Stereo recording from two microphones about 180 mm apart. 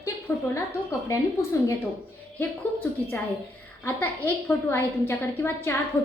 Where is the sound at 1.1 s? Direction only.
15° left (ahead or behind).